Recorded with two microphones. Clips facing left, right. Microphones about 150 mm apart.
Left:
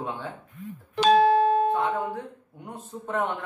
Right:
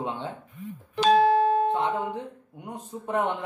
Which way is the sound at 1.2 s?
80° left.